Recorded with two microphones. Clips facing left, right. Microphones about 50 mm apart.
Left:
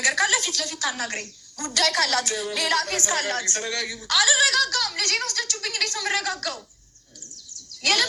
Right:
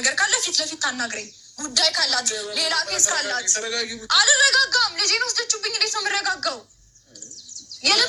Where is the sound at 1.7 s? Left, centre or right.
Left.